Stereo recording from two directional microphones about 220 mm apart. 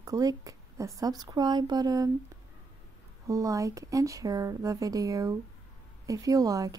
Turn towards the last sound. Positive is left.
turn(degrees=-15)  # may be behind; listen again after turning